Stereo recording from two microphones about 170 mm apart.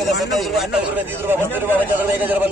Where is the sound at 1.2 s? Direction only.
10° right (ahead or behind).